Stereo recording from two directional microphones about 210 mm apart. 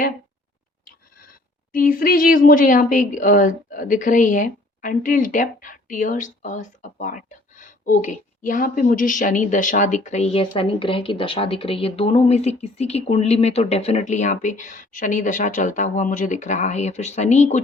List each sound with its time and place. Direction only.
0.9 s speech: 40° left (ahead or behind)